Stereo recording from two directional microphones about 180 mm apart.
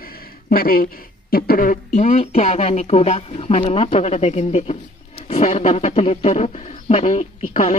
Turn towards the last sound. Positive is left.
turn(degrees=35)  # may be behind; listen again after turning